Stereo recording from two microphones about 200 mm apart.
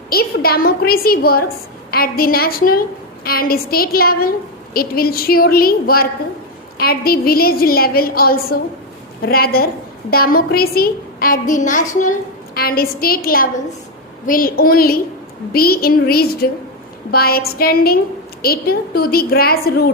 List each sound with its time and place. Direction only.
0.1 s a woman's voice: 50° left (ahead or behind)
12.5 s a woman's voice: 50° left (ahead or behind)